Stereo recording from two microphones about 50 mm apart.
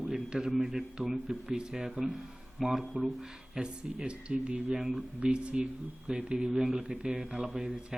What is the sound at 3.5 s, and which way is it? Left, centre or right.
Speech, centre.